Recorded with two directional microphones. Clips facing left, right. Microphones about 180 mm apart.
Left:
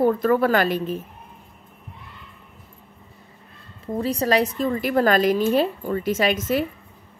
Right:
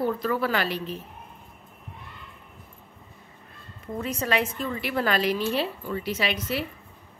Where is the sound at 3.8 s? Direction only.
30° left (ahead or behind).